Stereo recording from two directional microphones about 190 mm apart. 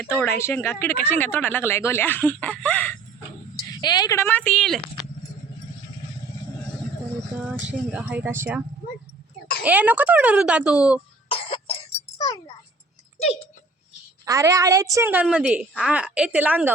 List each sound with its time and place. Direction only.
0.0 s speech: 10° left (ahead or behind)
3.5 s speech: 20° left (ahead or behind); by 4.8 s 5° left (ahead or behind)
7.9 s a woman's voice: 5° right (ahead or behind)
9.6 s a woman's voice: 10° right (ahead or behind)
11.3 s cough: 30° left (ahead or behind)
12.2 s a sound: 20° left (ahead or behind)
14.3 s a woman's voice: 15° right (ahead or behind)